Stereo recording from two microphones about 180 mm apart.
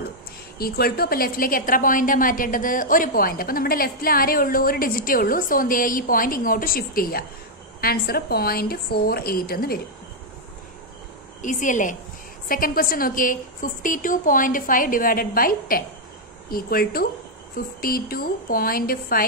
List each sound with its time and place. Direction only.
0.6 s a woman's voice: 60° left (ahead or behind)
11.4 s a woman's voice: 45° left (ahead or behind)